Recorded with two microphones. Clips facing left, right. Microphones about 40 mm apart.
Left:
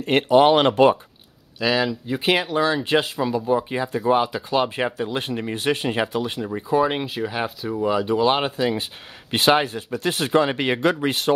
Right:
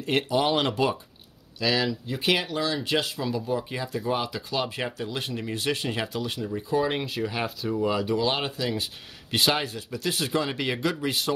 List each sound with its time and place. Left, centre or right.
0.0 s speech: left
1.6 s speech: centre; by 11.3 s left